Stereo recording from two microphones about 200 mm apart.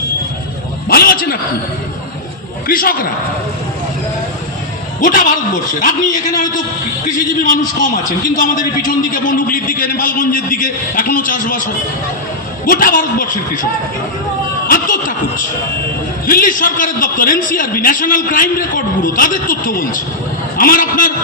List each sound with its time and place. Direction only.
0.9 s a sound: 50° left (ahead or behind)
2.6 s a man's voice: 45° left (ahead or behind)
4.9 s a man's voice: 40° left (ahead or behind)
8.4 s a man's voice: 40° left (ahead or behind)
14.7 s a man's voice: 45° left (ahead or behind)
16.2 s a man's voice: 45° left (ahead or behind)